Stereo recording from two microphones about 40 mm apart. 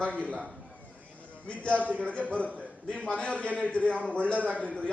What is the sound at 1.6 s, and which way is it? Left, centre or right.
A man's voice, left.